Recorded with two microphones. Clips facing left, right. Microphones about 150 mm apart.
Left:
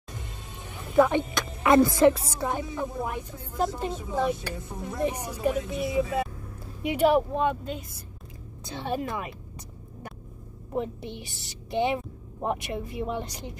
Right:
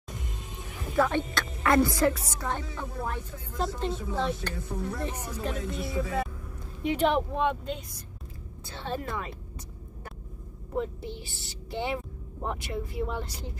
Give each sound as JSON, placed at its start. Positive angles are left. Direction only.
{"t": 0.9, "sound": "a woman's voice", "side_deg": 15}
{"t": 2.4, "sound": "speech", "side_deg": 15}
{"t": 5.7, "sound": "speech", "side_deg": 0}
{"t": 5.9, "sound": "speech", "side_deg": 25}
{"t": 6.8, "sound": "speech", "side_deg": 10}
{"t": 8.6, "sound": "speech", "side_deg": 15}
{"t": 10.8, "sound": "speech", "side_deg": 20}